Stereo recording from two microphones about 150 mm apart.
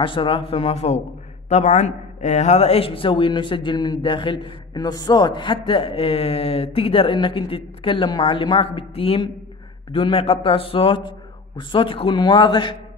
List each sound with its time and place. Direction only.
0.0 s a man's voice: 35° left (ahead or behind)